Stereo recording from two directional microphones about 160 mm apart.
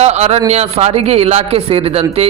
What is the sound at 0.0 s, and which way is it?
A man's voice, 40° right (ahead or behind).